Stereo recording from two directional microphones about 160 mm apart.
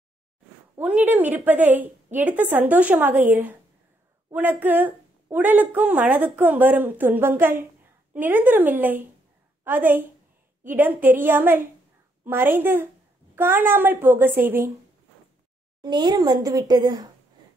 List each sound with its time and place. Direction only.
0.7 s a woman's voice: 10° right (ahead or behind)
14.3 s a woman's voice: 60° right (ahead or behind)
15.8 s speech: 25° right (ahead or behind)